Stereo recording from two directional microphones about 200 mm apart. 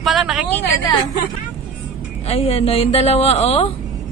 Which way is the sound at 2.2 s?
30° left (ahead or behind).